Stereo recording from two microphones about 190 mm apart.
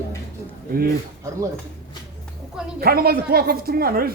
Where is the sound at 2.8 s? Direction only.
55° right (ahead or behind).